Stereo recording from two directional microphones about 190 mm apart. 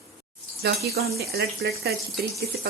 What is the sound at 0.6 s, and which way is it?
Speech, 55° right (ahead or behind).